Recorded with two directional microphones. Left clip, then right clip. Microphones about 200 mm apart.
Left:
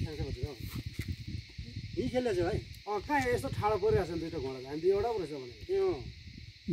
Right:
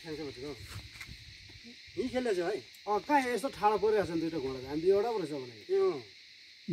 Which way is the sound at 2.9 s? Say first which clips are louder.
Right 2 dB; 10° right (ahead or behind).